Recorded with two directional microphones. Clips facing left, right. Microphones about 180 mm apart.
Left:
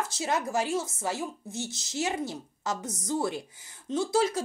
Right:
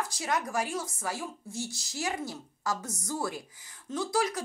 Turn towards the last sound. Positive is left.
turn(degrees=25)  # may be behind; listen again after turning